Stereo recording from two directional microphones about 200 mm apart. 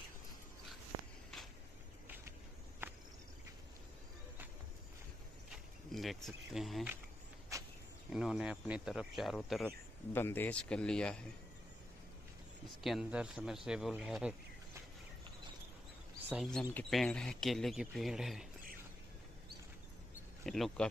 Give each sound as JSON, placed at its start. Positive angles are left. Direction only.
{"t": 2.8, "sound": "cricket", "side_deg": -10}
{"t": 5.9, "sound": "speech", "side_deg": 0}
{"t": 7.5, "sound": "a sound", "side_deg": -15}
{"t": 8.1, "sound": "speech", "side_deg": 0}
{"t": 10.1, "sound": "speech", "side_deg": 10}
{"t": 12.6, "sound": "speech", "side_deg": 0}
{"t": 16.3, "sound": "speech", "side_deg": 0}
{"t": 20.4, "sound": "speech", "side_deg": 0}